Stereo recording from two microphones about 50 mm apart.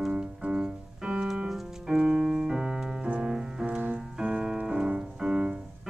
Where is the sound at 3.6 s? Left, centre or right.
Right.